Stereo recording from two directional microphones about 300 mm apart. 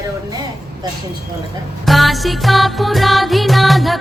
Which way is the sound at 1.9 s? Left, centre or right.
Centre.